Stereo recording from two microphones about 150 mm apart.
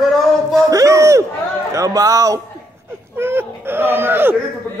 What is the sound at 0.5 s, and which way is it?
Speech, 20° right (ahead or behind).